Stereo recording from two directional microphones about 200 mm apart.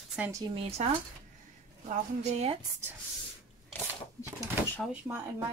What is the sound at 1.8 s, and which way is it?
Speech, 35° right (ahead or behind).